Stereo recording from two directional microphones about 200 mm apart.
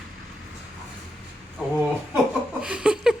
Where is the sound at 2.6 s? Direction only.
5° right (ahead or behind).